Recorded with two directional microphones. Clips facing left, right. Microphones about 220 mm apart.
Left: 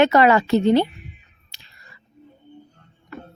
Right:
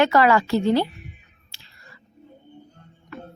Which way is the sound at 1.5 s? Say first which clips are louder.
Even; 15° left (ahead or behind).